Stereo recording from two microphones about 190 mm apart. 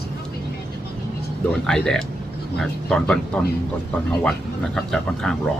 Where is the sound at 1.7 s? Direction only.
5° left (ahead or behind).